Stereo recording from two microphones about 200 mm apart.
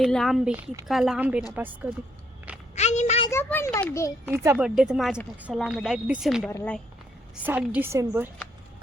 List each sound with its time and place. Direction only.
0.0 s a woman's voice: centre (ahead or behind)
2.7 s a sound: 35° left (ahead or behind)
3.2 s a child's voice: 15° left (ahead or behind)
4.5 s a child's voice: centre (ahead or behind)
7.4 s a woman's voice: 10° right (ahead or behind)